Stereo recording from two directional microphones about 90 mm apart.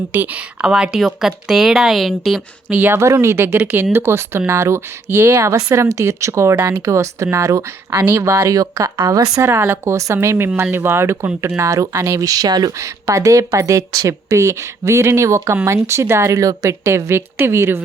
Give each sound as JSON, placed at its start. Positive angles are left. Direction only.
{"t": 0.1, "sound": "speech", "side_deg": -20}
{"t": 0.6, "sound": "a woman's voice", "side_deg": -5}
{"t": 2.6, "sound": "speech", "side_deg": -20}
{"t": 9.5, "sound": "speech", "side_deg": -30}
{"t": 12.8, "sound": "speech", "side_deg": -35}